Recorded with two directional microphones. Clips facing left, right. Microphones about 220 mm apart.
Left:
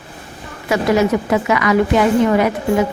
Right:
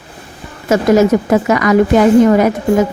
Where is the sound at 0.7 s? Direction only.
45° right (ahead or behind).